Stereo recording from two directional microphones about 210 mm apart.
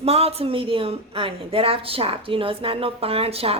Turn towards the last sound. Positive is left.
turn(degrees=-30)  # may be behind; listen again after turning